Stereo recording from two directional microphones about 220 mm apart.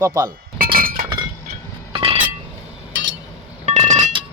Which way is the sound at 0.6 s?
40° right (ahead or behind).